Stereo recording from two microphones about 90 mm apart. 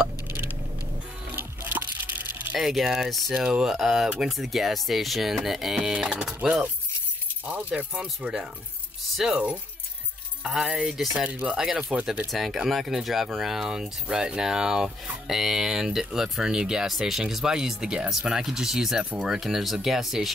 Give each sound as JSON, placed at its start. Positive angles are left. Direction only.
{"t": 1.3, "sound": "water", "side_deg": -25}
{"t": 2.5, "sound": "speech", "side_deg": -5}
{"t": 10.4, "sound": "speech", "side_deg": -10}
{"t": 12.3, "sound": "speech", "side_deg": 0}